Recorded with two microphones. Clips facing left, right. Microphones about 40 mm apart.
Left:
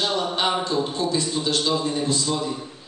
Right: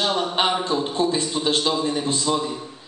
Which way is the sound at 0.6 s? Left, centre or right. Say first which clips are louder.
Right 2 dB; centre.